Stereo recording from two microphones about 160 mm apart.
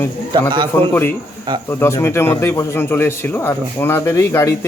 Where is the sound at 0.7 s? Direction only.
15° left (ahead or behind).